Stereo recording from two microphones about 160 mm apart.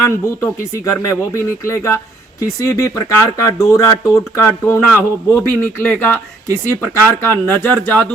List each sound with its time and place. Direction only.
0.0 s speech: 20° left (ahead or behind)